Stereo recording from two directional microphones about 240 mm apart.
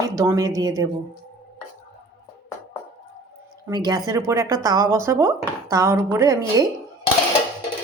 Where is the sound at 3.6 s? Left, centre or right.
Centre.